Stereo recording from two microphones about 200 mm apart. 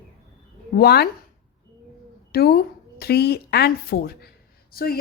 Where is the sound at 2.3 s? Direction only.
50° left (ahead or behind).